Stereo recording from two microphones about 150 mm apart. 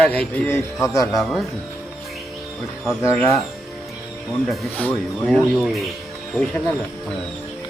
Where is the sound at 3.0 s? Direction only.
20° left (ahead or behind).